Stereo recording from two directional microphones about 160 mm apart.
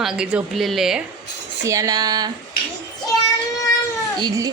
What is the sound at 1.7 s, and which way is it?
Speech, 20° right (ahead or behind).